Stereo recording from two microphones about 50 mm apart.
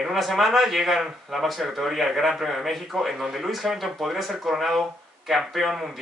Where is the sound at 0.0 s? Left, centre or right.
Centre.